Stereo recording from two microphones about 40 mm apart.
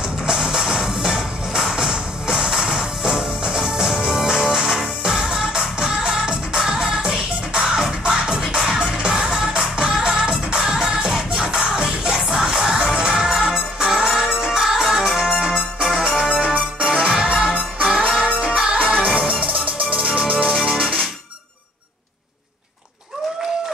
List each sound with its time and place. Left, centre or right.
0.3 s music: centre; by 21.0 s right